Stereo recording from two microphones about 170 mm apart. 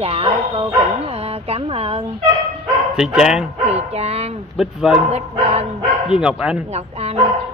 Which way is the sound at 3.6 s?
40° right (ahead or behind).